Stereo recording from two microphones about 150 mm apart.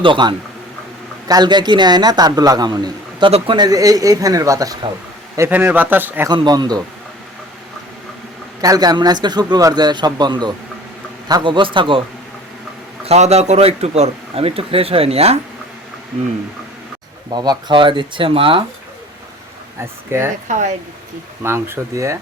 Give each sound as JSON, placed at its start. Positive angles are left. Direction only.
{"t": 0.0, "sound": "a man's voice", "side_deg": -30}
{"t": 5.4, "sound": "speech", "side_deg": -15}
{"t": 6.2, "sound": "a man's voice", "side_deg": -30}
{"t": 8.6, "sound": "a man's voice", "side_deg": -25}
{"t": 13.1, "sound": "speech", "side_deg": -45}
{"t": 17.3, "sound": "speech", "side_deg": -30}
{"t": 20.1, "sound": "speech", "side_deg": -15}
{"t": 20.5, "sound": "speech", "side_deg": -55}
{"t": 21.4, "sound": "a man's voice", "side_deg": -15}